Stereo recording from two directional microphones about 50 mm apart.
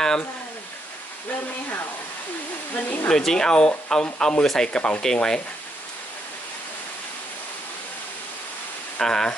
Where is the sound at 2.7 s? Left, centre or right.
Left.